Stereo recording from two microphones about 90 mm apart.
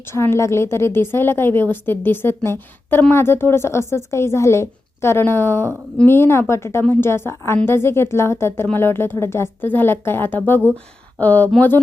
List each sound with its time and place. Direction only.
0.1 s a woman's voice: 30° left (ahead or behind)